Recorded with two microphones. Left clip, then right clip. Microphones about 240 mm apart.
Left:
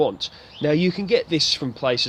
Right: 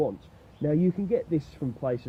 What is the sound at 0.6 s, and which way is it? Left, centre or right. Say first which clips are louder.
Speech: left 6 dB; left.